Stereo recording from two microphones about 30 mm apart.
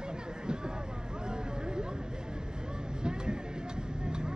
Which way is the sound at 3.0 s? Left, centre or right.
Right.